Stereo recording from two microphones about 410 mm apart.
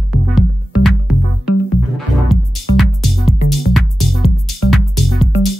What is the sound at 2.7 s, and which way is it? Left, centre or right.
Music, centre.